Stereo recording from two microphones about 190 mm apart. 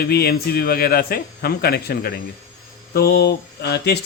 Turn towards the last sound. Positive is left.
turn(degrees=60)  # may be behind; listen again after turning